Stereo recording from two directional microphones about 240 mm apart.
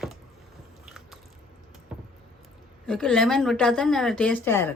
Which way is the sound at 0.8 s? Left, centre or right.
Centre.